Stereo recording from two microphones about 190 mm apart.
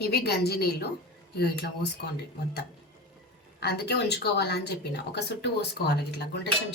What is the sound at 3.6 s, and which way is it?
Speech, 60° left (ahead or behind).